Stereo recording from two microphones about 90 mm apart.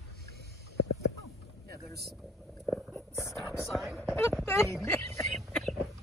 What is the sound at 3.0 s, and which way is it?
Whispering, 35° right (ahead or behind).